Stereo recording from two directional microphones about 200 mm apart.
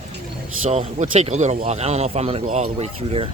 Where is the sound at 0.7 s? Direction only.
30° right (ahead or behind).